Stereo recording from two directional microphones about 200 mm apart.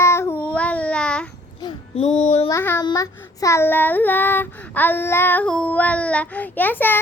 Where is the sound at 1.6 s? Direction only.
25° left (ahead or behind).